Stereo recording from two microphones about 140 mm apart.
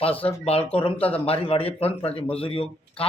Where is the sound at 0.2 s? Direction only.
45° left (ahead or behind).